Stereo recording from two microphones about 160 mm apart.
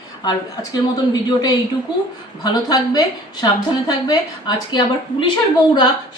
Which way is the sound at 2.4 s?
25° left (ahead or behind).